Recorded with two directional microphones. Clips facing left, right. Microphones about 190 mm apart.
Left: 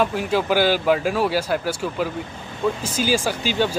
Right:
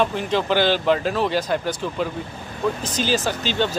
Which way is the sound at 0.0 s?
5° left (ahead or behind).